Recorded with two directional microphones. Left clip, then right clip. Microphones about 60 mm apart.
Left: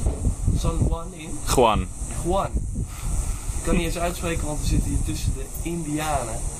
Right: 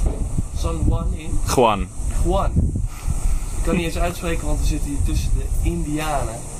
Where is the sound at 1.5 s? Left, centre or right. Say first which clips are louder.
Right 2 dB; centre.